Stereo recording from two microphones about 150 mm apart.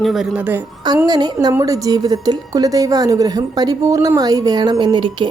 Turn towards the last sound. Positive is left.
turn(degrees=-30)  # may be behind; listen again after turning